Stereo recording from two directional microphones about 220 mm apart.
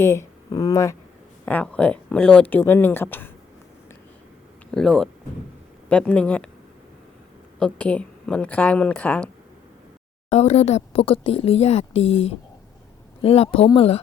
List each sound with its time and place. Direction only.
0.0 s speech: 15° left (ahead or behind)
4.7 s speech: 5° left (ahead or behind)
7.6 s speech: 5° left (ahead or behind)
10.2 s speech: 30° left (ahead or behind)